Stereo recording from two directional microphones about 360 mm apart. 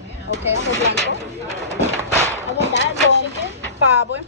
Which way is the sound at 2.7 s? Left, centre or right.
Left.